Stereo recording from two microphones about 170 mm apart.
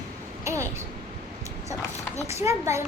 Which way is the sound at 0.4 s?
15° right (ahead or behind).